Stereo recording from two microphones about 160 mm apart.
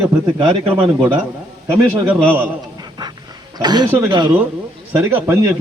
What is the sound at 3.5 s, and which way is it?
Speech, 25° right (ahead or behind).